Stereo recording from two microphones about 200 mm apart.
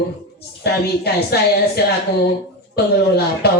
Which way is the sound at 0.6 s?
55° left (ahead or behind).